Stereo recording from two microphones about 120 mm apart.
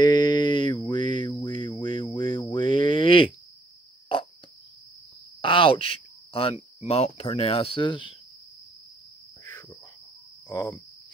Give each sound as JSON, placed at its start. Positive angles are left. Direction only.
{"t": 0.0, "sound": "a sound", "side_deg": 35}
{"t": 5.4, "sound": "cricket", "side_deg": 45}
{"t": 6.9, "sound": "speech", "side_deg": 55}
{"t": 9.4, "sound": "cricket", "side_deg": 25}